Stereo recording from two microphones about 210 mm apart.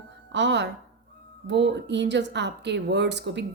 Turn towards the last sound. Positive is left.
turn(degrees=-55)  # may be behind; listen again after turning